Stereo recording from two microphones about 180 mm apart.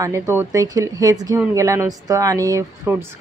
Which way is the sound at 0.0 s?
15° right (ahead or behind).